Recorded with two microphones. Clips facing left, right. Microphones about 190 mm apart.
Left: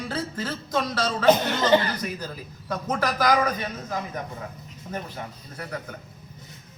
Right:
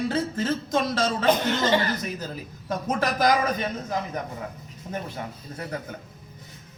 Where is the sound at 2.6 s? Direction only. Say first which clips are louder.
Right 1 dB; 25° right (ahead or behind).